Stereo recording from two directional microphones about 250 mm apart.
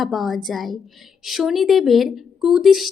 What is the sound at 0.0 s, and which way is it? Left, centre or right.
A woman's voice, centre.